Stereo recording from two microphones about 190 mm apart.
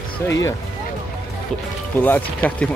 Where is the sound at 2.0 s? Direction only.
10° left (ahead or behind).